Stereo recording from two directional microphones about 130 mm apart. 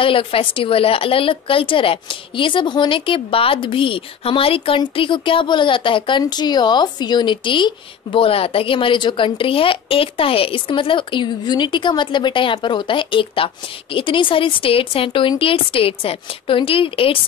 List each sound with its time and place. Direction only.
0.0 s a woman's voice: 45° left (ahead or behind)